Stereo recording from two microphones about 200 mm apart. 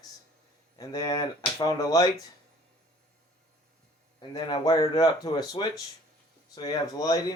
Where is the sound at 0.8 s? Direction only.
20° left (ahead or behind).